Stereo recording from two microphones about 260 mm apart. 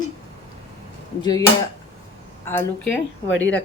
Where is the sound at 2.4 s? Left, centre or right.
Centre.